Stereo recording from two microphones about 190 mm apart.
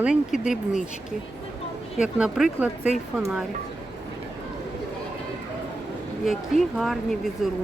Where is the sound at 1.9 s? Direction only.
5° right (ahead or behind).